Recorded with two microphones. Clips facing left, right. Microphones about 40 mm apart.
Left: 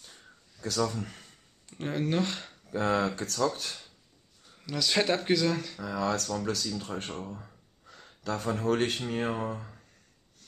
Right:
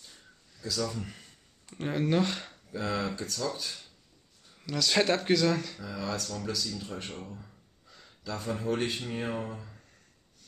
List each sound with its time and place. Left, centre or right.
0.6 s speech: left
1.7 s speech: centre
2.7 s speech: left
4.6 s speech: centre
5.8 s speech: left
6.2 s speech: left
6.5 s speech: left